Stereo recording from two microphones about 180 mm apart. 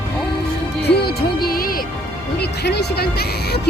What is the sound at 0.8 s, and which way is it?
Music, 65° left (ahead or behind).